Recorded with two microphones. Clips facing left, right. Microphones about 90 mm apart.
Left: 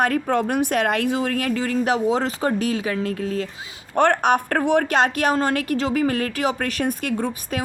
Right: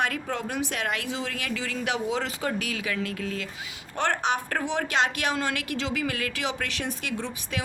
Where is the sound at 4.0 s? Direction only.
50° left (ahead or behind).